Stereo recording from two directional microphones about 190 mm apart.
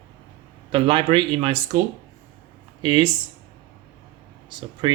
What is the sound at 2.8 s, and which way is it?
Speech, 25° right (ahead or behind).